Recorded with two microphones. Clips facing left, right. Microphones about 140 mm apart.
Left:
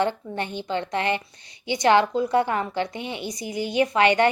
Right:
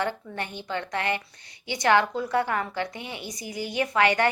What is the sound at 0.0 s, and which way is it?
A woman's voice, 25° left (ahead or behind).